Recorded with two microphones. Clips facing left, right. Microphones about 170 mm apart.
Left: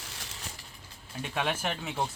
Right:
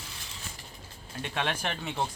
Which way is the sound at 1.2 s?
10° left (ahead or behind).